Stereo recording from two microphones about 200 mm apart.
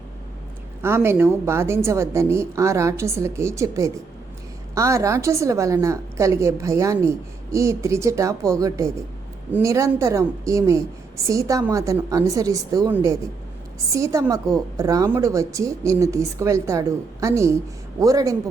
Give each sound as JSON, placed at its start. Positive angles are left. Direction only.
{"t": 0.8, "sound": "a woman's voice", "side_deg": -10}